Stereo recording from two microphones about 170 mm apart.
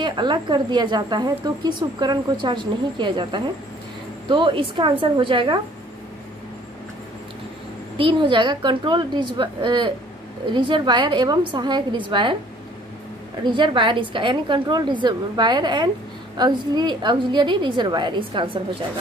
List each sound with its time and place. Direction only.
0.0 s speech: 25° right (ahead or behind)
8.0 s speech: 30° right (ahead or behind)
13.4 s speech: 30° right (ahead or behind)